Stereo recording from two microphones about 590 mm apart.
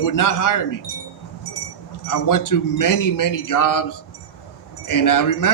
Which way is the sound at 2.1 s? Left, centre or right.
Left.